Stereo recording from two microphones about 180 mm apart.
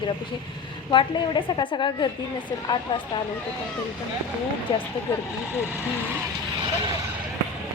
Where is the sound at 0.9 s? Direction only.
25° left (ahead or behind).